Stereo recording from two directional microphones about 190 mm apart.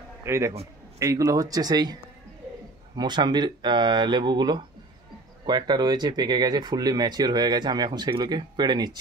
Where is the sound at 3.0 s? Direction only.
25° right (ahead or behind).